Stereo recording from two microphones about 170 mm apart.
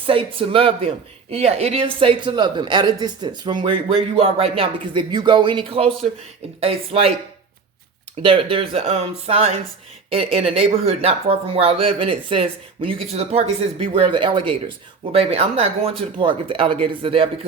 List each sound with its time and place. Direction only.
0.0 s speech: 30° right (ahead or behind)
8.2 s speech: 30° right (ahead or behind)